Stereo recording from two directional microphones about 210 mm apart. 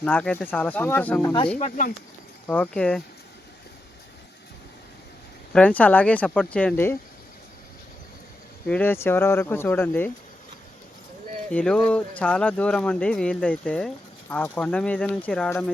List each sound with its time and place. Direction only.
0.0 s speech: 5° left (ahead or behind)
1.5 s speech: 35° left (ahead or behind)
2.5 s speech: 5° left (ahead or behind)
5.5 s speech: 5° left (ahead or behind)
8.6 s speech: 5° left (ahead or behind)
11.5 s speech: 5° left (ahead or behind)